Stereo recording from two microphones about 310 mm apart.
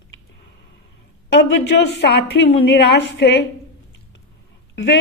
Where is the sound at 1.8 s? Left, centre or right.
Left.